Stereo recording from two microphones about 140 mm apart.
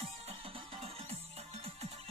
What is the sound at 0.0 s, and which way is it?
Music, 45° right (ahead or behind).